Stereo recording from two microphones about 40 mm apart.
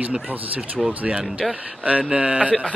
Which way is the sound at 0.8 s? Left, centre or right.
Right.